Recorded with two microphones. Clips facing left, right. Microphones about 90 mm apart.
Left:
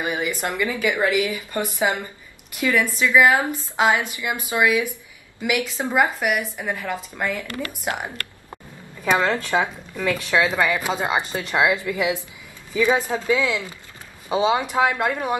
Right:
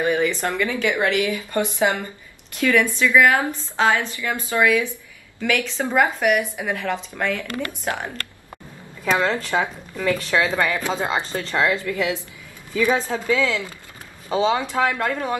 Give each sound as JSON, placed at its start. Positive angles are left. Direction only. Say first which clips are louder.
{"t": 0.0, "sound": "a woman's voice", "louder": "right 4 dB", "side_deg": 15}
{"t": 7.4, "sound": "speech", "louder": "right 2 dB", "side_deg": -20}
{"t": 9.3, "sound": "a woman's voice", "louder": "left 1 dB", "side_deg": 10}